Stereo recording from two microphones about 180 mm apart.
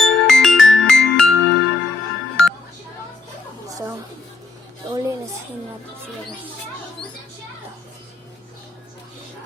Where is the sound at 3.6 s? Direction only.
20° right (ahead or behind).